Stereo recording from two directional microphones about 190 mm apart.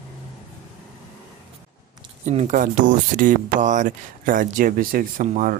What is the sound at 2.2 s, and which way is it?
Speech, 35° right (ahead or behind).